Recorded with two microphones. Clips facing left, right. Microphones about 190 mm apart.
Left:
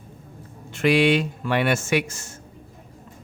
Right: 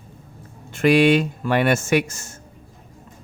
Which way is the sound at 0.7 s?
45° right (ahead or behind).